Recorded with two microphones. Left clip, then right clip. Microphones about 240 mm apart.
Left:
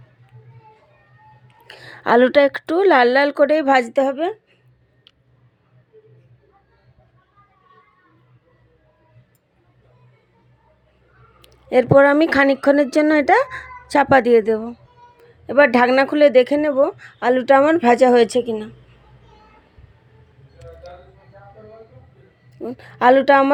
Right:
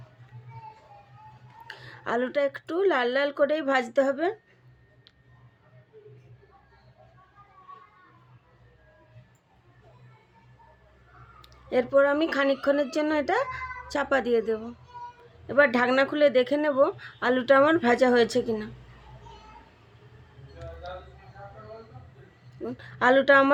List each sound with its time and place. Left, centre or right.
1.6 s a woman's voice: left
11.4 s a woman's voice: left
22.5 s a woman's voice: left